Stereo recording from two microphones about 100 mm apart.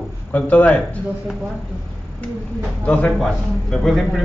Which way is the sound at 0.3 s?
15° left (ahead or behind).